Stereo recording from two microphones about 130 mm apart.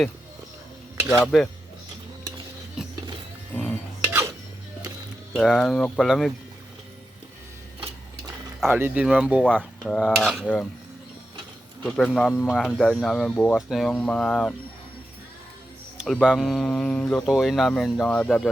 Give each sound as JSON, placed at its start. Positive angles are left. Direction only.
{"t": 1.2, "sound": "speech", "side_deg": 0}
{"t": 2.8, "sound": "music", "side_deg": -5}
{"t": 3.5, "sound": "music", "side_deg": 10}
{"t": 4.0, "sound": "dishes", "side_deg": -20}
{"t": 5.3, "sound": "speech", "side_deg": 5}
{"t": 8.6, "sound": "speech", "side_deg": -15}
{"t": 9.6, "sound": "speech", "side_deg": 5}
{"t": 10.4, "sound": "speech", "side_deg": 10}
{"t": 11.8, "sound": "speech", "side_deg": 5}
{"t": 12.3, "sound": "a man's voice", "side_deg": 20}
{"t": 12.5, "sound": "speech", "side_deg": 0}
{"t": 13.6, "sound": "speech", "side_deg": -5}
{"t": 13.9, "sound": "speech", "side_deg": 10}
{"t": 16.2, "sound": "speech", "side_deg": -5}